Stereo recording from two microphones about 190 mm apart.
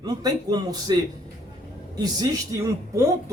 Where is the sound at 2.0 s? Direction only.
20° right (ahead or behind).